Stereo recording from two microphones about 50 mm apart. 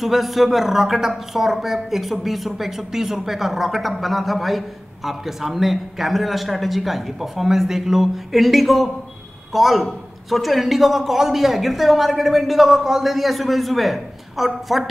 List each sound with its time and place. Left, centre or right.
0.0 s speech: centre